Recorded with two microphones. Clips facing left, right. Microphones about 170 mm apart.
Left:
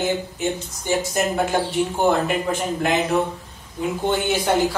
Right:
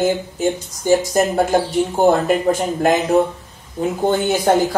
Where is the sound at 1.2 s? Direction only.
35° right (ahead or behind).